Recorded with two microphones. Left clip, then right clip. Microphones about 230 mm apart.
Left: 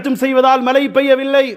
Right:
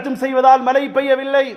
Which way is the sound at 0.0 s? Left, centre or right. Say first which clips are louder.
Left 1 dB; left.